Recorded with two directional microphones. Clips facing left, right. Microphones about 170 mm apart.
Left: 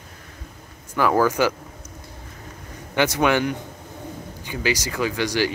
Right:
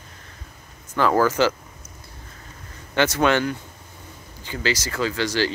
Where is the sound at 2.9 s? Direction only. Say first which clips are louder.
Even; 15° left (ahead or behind).